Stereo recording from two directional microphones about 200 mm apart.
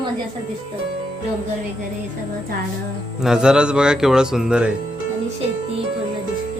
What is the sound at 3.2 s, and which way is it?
Speech, 5° right (ahead or behind).